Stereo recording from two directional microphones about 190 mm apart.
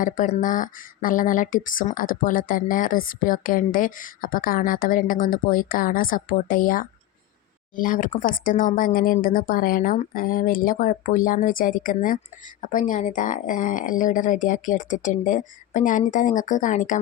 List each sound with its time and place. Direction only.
0.0 s speech: 45° left (ahead or behind)